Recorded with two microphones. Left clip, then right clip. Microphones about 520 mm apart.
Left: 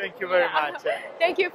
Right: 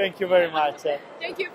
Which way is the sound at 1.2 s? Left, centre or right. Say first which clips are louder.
Left 12 dB; left.